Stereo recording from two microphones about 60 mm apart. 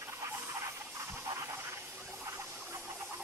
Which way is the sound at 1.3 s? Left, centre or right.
Right.